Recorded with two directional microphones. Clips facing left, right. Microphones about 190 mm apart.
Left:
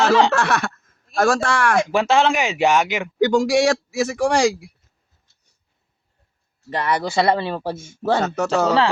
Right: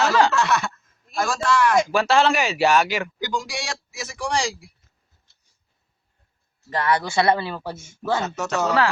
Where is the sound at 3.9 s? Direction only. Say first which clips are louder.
Left 8 dB; 60° left (ahead or behind).